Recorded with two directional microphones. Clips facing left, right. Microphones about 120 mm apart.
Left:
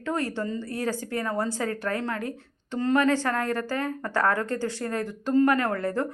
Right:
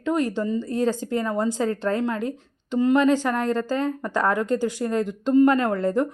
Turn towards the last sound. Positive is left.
turn(degrees=-20)  # may be behind; listen again after turning